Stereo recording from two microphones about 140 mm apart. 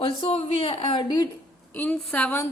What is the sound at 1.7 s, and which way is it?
Speech, 10° left (ahead or behind).